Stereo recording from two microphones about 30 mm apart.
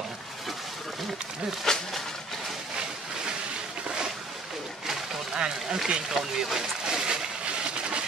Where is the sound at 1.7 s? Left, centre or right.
Centre.